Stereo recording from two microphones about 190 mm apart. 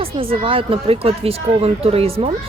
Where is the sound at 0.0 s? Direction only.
30° right (ahead or behind).